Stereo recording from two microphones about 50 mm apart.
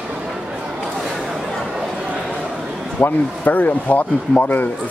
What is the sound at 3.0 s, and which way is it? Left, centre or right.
Speech, left.